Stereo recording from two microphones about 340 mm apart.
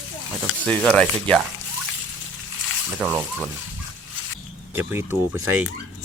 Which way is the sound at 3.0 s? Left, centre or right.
Centre.